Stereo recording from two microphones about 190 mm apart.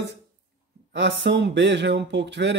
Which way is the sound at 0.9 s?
70° right (ahead or behind).